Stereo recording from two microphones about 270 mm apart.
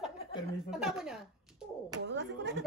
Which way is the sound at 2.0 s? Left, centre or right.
Right.